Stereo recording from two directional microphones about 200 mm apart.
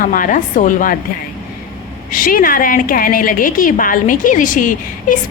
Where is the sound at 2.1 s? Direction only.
45° left (ahead or behind).